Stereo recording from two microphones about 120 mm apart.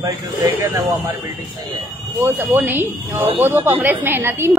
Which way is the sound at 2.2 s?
15° right (ahead or behind).